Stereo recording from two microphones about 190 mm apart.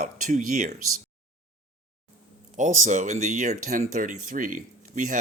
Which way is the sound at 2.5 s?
40° right (ahead or behind).